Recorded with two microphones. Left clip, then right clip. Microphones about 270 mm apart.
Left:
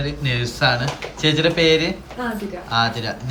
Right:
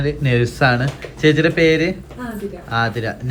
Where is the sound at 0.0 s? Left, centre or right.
Centre.